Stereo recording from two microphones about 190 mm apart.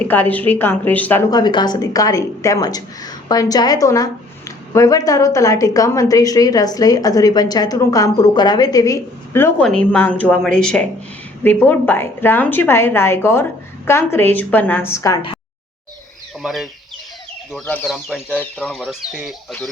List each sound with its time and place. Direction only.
0.0 s a woman's voice: 10° left (ahead or behind)
1.3 s a woman's voice: 20° left (ahead or behind)
16.4 s speech: centre (ahead or behind)
17.7 s speech: centre (ahead or behind)